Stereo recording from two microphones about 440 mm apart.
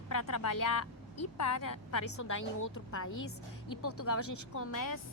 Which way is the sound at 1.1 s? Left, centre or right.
Left.